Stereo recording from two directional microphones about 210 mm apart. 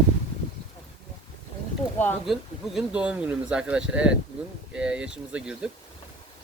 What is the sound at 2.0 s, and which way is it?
Speech, 10° left (ahead or behind).